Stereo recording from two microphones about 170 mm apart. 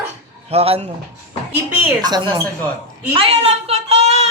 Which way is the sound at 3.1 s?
35° right (ahead or behind).